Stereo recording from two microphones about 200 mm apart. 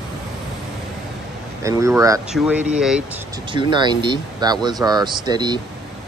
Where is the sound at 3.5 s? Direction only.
25° right (ahead or behind).